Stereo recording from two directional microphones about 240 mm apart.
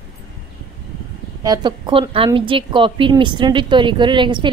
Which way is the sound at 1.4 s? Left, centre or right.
Centre.